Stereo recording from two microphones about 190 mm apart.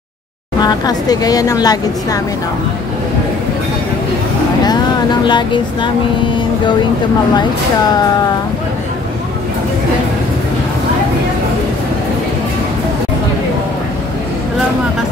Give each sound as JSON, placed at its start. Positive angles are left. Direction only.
{"t": 0.6, "sound": "a woman's voice", "side_deg": 20}
{"t": 5.2, "sound": "a woman's voice", "side_deg": 25}